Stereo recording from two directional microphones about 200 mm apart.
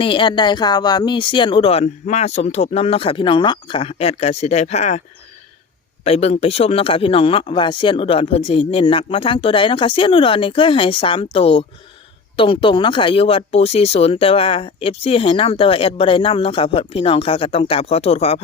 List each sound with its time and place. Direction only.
0.0 s speech: 25° left (ahead or behind)
6.1 s speech: 30° left (ahead or behind)